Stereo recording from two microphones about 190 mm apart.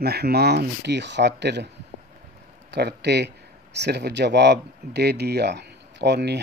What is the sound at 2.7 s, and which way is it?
Speech, 60° right (ahead or behind).